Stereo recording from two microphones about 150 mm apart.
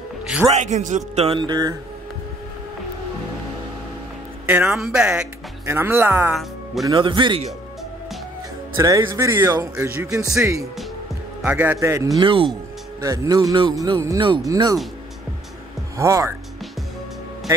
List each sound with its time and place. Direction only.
0.5 s speech: 50° right (ahead or behind); by 1.8 s 25° right (ahead or behind)
4.5 s speech: 10° right (ahead or behind)
6.3 s speech: centre (ahead or behind)
6.9 s speech: 30° right (ahead or behind)
8.7 s speech: 20° right (ahead or behind)
11.4 s speech: 10° right (ahead or behind)
12.2 s speech: 35° right (ahead or behind)
13.0 s speech: 20° right (ahead or behind)
14.5 s speech: 20° right (ahead or behind)
16.0 s speech: 20° right (ahead or behind)